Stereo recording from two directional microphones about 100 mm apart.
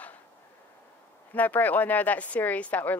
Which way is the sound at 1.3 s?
15° left (ahead or behind).